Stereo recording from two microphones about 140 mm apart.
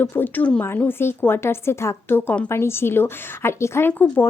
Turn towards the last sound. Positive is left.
turn(degrees=15)  # may be behind; listen again after turning